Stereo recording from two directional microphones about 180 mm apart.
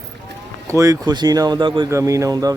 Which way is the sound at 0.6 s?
15° right (ahead or behind).